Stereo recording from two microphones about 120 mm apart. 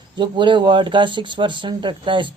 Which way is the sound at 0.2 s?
40° right (ahead or behind).